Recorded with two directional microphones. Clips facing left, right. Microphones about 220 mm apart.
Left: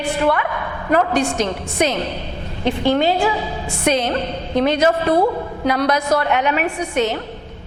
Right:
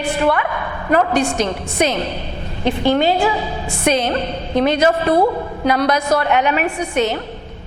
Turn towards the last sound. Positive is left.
turn(degrees=-10)  # may be behind; listen again after turning